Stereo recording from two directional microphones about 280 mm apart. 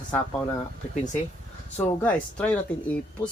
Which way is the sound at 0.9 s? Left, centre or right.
Left.